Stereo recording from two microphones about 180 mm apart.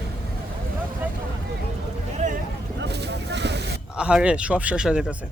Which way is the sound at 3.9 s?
5° right (ahead or behind).